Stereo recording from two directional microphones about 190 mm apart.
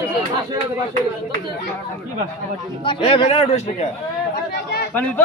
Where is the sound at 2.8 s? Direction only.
30° left (ahead or behind).